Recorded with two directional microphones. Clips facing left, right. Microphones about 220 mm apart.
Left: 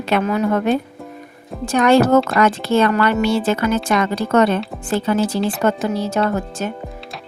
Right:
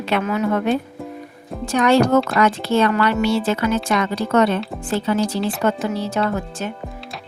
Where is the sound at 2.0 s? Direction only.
Centre (ahead or behind).